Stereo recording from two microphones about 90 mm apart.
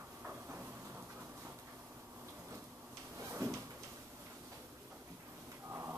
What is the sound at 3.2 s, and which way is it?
Cupboard open or close, 30° right (ahead or behind).